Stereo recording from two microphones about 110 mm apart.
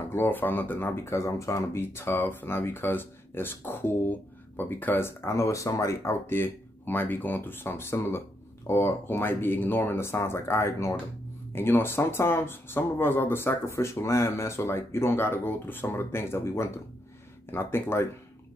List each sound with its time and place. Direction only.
0.1 s speech: 20° left (ahead or behind)